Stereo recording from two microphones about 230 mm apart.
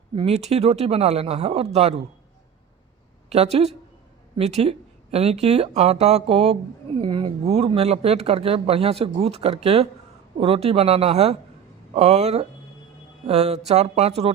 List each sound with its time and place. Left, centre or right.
0.2 s speech: right
3.2 s speech: right